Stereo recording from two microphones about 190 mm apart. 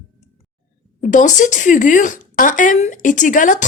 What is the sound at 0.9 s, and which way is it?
A woman's voice, 40° left (ahead or behind).